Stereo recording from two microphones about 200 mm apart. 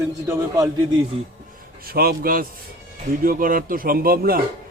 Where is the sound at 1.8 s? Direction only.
50° right (ahead or behind).